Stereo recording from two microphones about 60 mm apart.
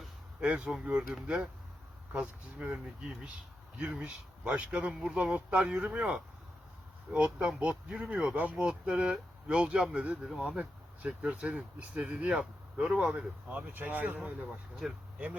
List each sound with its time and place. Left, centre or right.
0.3 s speech: centre
3.8 s speech: right
10.2 s speech: centre
11.0 s speech: right
12.3 s speech: centre
13.0 s speech: centre
14.8 s speech: centre